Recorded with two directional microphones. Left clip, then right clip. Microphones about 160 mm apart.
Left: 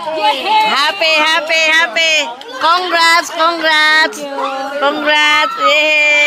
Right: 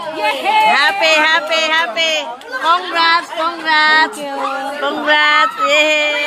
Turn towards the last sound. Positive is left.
turn(degrees=0)  # may be behind; listen again after turning